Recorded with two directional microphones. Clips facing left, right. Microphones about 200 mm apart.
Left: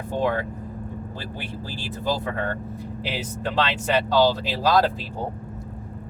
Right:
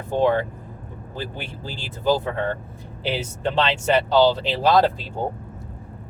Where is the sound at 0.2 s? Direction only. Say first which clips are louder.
Right 5 dB; 25° right (ahead or behind).